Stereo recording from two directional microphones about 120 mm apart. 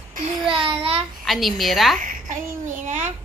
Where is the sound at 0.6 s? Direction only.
50° right (ahead or behind).